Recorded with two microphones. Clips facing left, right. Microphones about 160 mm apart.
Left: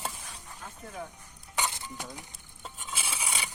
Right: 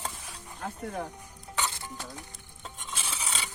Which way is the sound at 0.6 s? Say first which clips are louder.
Right 10 dB; 70° right (ahead or behind).